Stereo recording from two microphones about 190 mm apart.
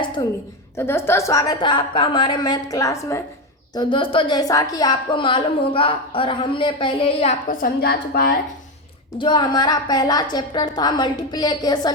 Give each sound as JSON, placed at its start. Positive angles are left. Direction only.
{"t": 0.8, "sound": "a woman's voice", "side_deg": 15}
{"t": 3.8, "sound": "a woman's voice", "side_deg": 25}
{"t": 7.4, "sound": "a woman's voice", "side_deg": 50}
{"t": 9.1, "sound": "a woman's voice", "side_deg": 25}